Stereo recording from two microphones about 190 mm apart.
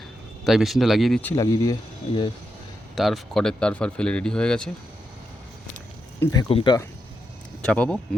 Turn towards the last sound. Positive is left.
turn(degrees=5)  # may be behind; listen again after turning